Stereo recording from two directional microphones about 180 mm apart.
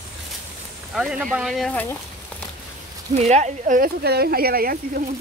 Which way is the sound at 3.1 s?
40° right (ahead or behind).